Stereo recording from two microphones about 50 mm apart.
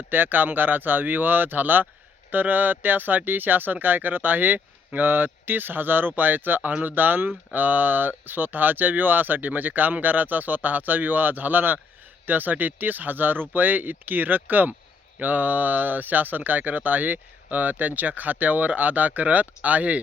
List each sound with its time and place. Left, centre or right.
0.1 s speech: right